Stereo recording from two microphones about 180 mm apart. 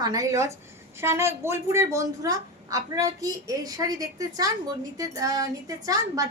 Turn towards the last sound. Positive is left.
turn(degrees=-20)  # may be behind; listen again after turning